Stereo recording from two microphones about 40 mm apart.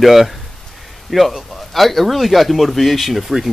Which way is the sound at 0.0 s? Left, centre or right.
Centre.